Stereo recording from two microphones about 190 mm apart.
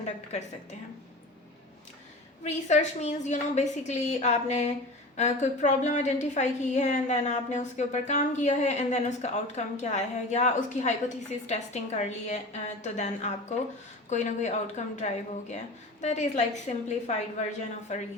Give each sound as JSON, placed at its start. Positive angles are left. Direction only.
{"t": 0.0, "sound": "a woman's voice", "side_deg": 35}
{"t": 2.4, "sound": "a woman's voice", "side_deg": 35}